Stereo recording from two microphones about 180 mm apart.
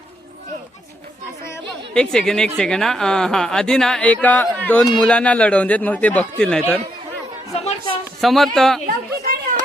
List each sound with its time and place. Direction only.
1.9 s a woman's voice: 5° left (ahead or behind)
7.5 s music: 35° left (ahead or behind)
8.2 s a woman's voice: centre (ahead or behind)
9.2 s a sound: 55° right (ahead or behind)